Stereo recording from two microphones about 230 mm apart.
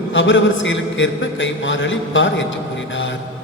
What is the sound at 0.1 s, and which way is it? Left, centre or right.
A man's voice, left.